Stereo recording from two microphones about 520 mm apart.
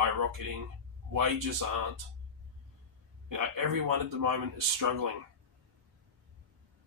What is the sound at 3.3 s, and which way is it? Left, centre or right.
Speech, right.